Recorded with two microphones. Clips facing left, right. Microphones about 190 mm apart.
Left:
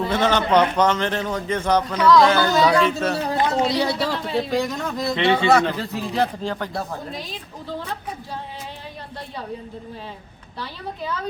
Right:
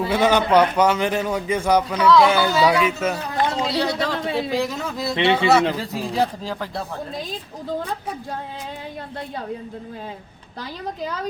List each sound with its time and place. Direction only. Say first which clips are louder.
0.0 s a man's voice: right 2 dB; 10° right (ahead or behind)
3.2 s speech: left 2 dB; 30° left (ahead or behind)
3.8 s a man's voice: even; 10° left (ahead or behind)
4.4 s speech: left 3 dB; centre (ahead or behind)